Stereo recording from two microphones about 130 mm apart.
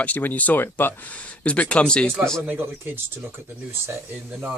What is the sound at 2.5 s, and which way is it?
Speech, 15° right (ahead or behind).